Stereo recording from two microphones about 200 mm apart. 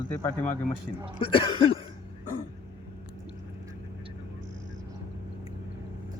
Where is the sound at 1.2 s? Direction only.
25° left (ahead or behind).